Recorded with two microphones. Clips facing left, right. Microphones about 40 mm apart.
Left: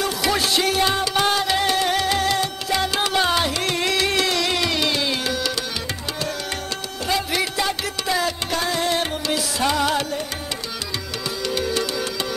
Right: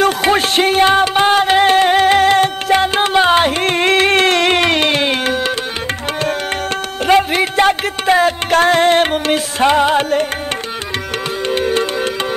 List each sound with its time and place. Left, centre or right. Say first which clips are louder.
0.0 s music: right 8 dB; right
7.1 s music: right 10 dB; right
11.4 s music: right 7 dB; right